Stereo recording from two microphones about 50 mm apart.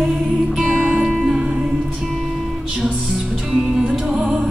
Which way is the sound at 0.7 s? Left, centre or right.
Right.